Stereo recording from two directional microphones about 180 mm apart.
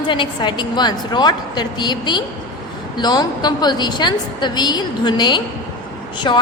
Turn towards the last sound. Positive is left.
turn(degrees=25)  # may be behind; listen again after turning